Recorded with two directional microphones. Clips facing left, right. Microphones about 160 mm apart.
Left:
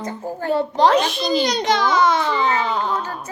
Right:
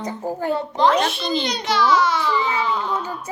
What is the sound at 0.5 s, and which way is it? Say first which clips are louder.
Baby cry: left 3 dB; 35° left (ahead or behind).